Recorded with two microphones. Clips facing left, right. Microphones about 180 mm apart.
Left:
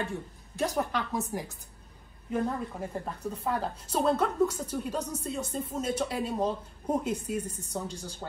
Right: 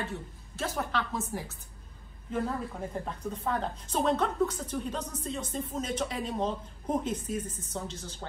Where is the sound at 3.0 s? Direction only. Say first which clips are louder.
Even; 5° left (ahead or behind).